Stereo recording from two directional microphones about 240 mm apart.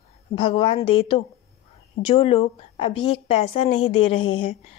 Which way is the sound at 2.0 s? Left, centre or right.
Left.